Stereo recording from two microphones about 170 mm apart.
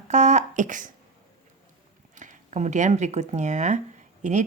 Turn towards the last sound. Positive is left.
turn(degrees=-45)  # may be behind; listen again after turning